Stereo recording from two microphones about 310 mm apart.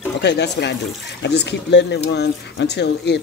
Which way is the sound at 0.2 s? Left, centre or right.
Left.